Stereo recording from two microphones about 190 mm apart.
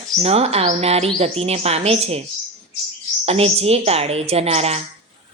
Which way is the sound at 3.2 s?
30° right (ahead or behind).